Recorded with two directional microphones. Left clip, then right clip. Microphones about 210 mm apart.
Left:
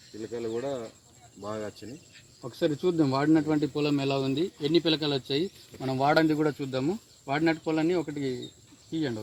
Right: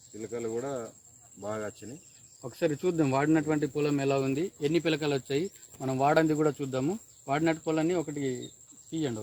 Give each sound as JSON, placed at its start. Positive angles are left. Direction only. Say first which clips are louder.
{"t": 0.2, "sound": "speech", "louder": "left 1 dB", "side_deg": -5}
{"t": 2.4, "sound": "speech", "louder": "left 2 dB", "side_deg": 10}
{"t": 4.0, "sound": "speech", "louder": "even", "side_deg": 0}
{"t": 4.6, "sound": "speech", "louder": "left 2 dB", "side_deg": 20}
{"t": 6.2, "sound": "speech", "louder": "left 1 dB", "side_deg": 0}